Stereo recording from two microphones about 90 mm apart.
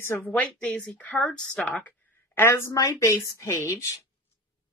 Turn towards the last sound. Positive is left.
turn(degrees=35)  # may be behind; listen again after turning